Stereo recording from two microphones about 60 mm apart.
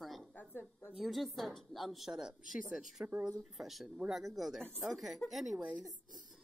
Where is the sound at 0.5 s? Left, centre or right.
Left.